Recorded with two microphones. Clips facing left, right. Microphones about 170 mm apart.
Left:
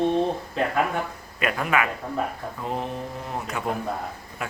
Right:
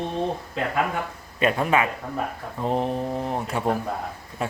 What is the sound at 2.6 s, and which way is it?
Mantra, 35° right (ahead or behind).